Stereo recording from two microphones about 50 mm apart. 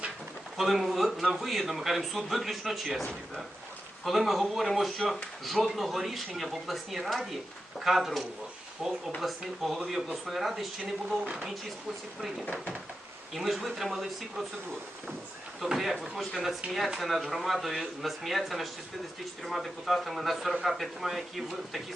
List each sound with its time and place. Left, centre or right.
0.5 s a man's voice: centre
11.3 s speech: centre
13.3 s a man's voice: centre
15.6 s a man's voice: centre